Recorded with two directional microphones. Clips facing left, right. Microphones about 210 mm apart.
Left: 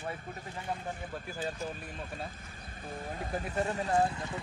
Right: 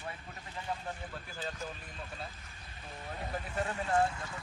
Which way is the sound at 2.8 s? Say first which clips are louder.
Left 4 dB; 45° left (ahead or behind).